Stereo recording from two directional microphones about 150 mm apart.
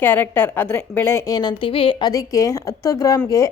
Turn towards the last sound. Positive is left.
turn(degrees=20)  # may be behind; listen again after turning